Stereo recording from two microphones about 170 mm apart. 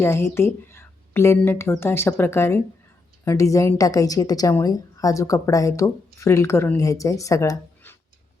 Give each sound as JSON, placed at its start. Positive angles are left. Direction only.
{"t": 0.0, "sound": "a woman's voice", "side_deg": 15}